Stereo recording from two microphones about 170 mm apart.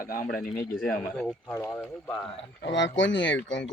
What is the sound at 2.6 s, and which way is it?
Speech, 90° left.